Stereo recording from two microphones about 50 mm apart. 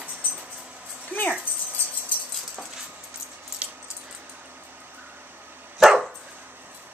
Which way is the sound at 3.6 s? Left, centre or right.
Right.